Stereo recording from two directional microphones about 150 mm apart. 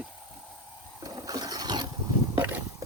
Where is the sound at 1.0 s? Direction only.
25° right (ahead or behind).